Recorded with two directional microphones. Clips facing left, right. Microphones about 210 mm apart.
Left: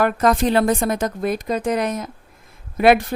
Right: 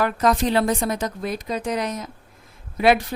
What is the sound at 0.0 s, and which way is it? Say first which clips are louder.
A woman's voice: left 3 dB; 50° left (ahead or behind).